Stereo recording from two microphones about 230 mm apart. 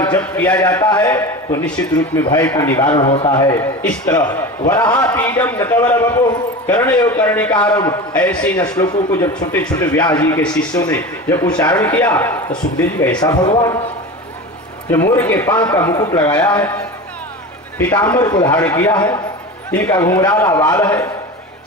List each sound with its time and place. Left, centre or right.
0.1 s a man's voice: centre
2.9 s a man's voice: left; by 8.5 s centre
8.7 s a man's voice: centre
9.3 s speech: centre
9.8 s a man's voice: centre
10.4 s a man's voice: centre
14.9 s a man's voice: centre
16.3 s a man's voice: centre